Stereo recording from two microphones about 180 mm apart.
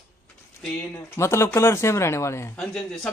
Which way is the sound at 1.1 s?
15° left (ahead or behind).